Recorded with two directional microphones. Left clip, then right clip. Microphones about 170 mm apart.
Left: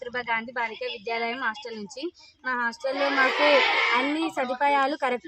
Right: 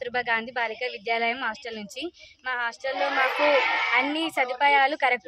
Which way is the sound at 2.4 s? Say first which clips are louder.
Left 1 dB; 30° right (ahead or behind).